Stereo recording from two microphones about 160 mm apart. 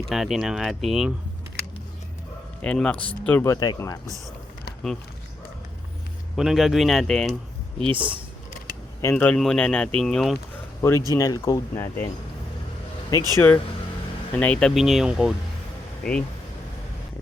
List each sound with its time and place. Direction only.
0.1 s speech: centre (ahead or behind)
2.6 s a man's voice: 5° left (ahead or behind); by 3.9 s 20° left (ahead or behind)
6.3 s speech: centre (ahead or behind)
7.8 s speech: 35° right (ahead or behind)
9.0 s a man's voice: 15° left (ahead or behind)
10.8 s speech: 15° left (ahead or behind)
13.1 s speech: 20° left (ahead or behind)
14.3 s a man's voice: 10° left (ahead or behind)
14.8 s speech: centre (ahead or behind)